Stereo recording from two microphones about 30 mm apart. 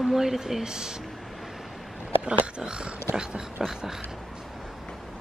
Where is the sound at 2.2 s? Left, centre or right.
Right.